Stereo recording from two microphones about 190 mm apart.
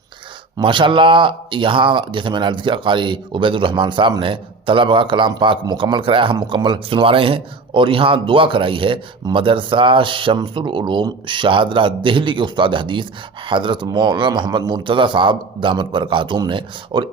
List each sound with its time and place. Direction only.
0.6 s speech: 25° right (ahead or behind)